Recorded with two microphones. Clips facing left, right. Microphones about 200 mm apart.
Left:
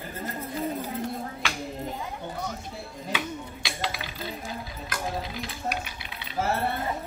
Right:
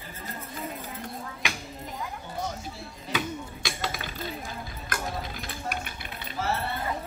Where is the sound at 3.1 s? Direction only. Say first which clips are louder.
Right 4 dB; 45° right (ahead or behind).